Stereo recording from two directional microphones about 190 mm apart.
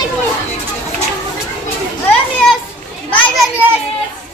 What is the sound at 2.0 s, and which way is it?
Children playing, 5° left (ahead or behind).